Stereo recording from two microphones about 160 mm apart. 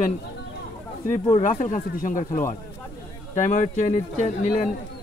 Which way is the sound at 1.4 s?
55° left (ahead or behind).